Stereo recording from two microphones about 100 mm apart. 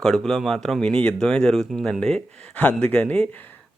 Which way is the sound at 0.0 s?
5° left (ahead or behind).